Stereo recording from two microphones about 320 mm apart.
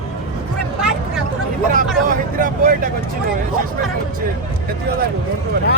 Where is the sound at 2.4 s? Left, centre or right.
Right.